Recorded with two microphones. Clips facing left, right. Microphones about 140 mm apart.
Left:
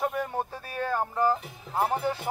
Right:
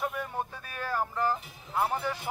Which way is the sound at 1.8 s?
35° left (ahead or behind).